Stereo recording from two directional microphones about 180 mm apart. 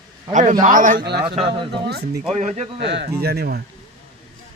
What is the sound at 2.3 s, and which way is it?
Speech, 40° right (ahead or behind).